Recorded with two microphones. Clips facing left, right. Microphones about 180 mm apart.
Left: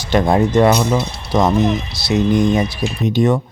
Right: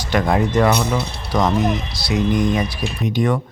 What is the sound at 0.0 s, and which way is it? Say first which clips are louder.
Speech: left 4 dB; 25° left (ahead or behind).